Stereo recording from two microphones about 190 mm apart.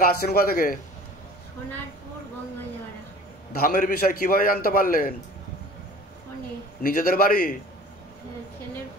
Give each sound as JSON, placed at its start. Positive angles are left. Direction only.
{"t": 0.0, "sound": "a man's voice", "side_deg": 55}
{"t": 3.5, "sound": "a man's voice", "side_deg": 50}
{"t": 6.8, "sound": "a man's voice", "side_deg": 50}